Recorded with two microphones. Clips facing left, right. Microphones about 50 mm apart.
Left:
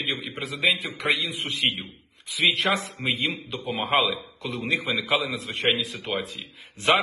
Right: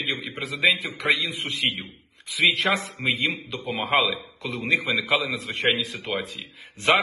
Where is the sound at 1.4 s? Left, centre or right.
Right.